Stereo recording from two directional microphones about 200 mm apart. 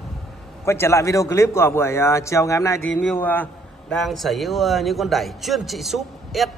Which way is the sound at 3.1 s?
10° left (ahead or behind).